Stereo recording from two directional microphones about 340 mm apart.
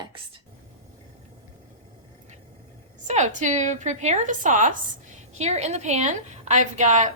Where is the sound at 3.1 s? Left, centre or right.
Right.